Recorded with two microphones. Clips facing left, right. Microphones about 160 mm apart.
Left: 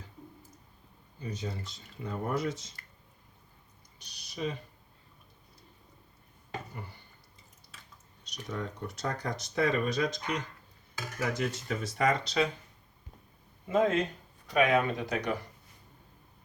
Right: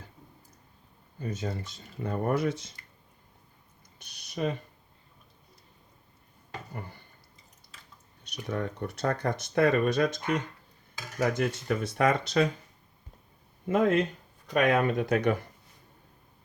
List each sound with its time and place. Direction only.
1.2 s speech: 50° right (ahead or behind)
3.9 s a sound: 55° right (ahead or behind)
8.2 s speech: 60° right (ahead or behind)
13.7 s speech: 60° right (ahead or behind)